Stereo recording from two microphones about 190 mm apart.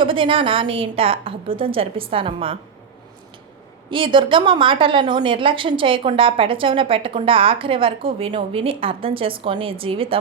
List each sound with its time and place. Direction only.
0.0 s a woman's voice: 25° right (ahead or behind)
3.8 s a woman's voice: 25° right (ahead or behind)